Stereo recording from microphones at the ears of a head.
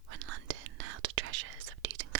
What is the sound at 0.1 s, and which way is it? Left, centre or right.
Whispering, right.